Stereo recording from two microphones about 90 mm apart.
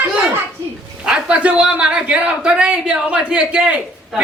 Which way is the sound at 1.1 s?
10° right (ahead or behind).